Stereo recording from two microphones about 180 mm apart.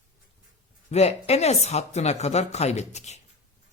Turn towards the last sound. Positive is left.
turn(degrees=40)  # may be behind; listen again after turning